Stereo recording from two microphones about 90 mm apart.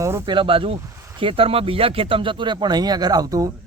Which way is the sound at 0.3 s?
75° right (ahead or behind).